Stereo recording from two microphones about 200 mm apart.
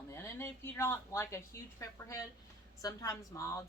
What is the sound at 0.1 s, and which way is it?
A woman's voice, 10° left (ahead or behind).